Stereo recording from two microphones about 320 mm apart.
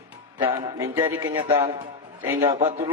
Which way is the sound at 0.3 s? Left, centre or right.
Centre.